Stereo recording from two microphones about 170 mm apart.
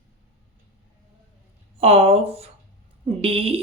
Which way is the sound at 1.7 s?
35° right (ahead or behind).